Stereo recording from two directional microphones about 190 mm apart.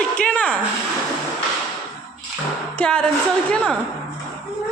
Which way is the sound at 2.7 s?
5° left (ahead or behind).